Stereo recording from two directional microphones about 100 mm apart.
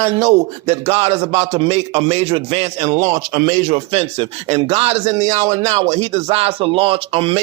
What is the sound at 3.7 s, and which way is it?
Speech, 75° right (ahead or behind).